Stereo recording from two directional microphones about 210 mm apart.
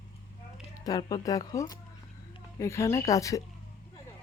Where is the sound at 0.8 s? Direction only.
20° left (ahead or behind).